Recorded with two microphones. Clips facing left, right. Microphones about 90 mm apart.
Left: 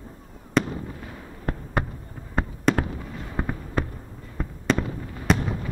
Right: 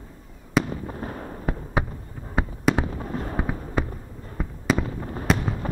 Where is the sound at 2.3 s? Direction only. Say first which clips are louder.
Even; 5° right (ahead or behind).